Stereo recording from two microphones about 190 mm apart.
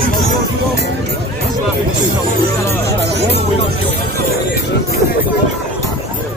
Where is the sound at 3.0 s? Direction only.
60° right (ahead or behind).